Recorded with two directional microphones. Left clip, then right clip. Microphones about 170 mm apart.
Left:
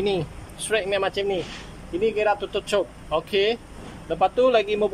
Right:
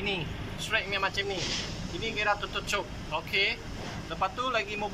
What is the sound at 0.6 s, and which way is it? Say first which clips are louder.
Speech: left 6 dB; 70° left (ahead or behind).